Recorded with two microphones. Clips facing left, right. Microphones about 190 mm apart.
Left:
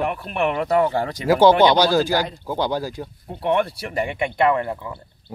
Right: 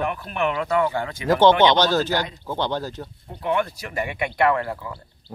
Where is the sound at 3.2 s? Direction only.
30° left (ahead or behind).